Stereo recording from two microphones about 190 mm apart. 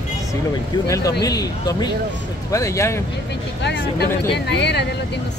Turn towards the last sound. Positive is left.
turn(degrees=60)  # may be behind; listen again after turning